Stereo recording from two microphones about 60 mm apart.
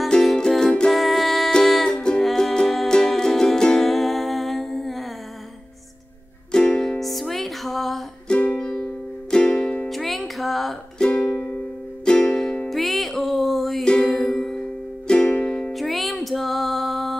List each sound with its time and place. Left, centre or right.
0.1 s music: centre
0.9 s music: centre
6.5 s music: centre
8.3 s music: left
9.3 s music: centre
9.8 s music: centre
11.0 s music: centre
13.8 s music: centre
15.0 s music: centre
15.7 s music: centre